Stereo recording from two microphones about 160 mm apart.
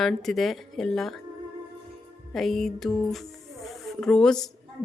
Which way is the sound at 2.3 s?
Centre (ahead or behind).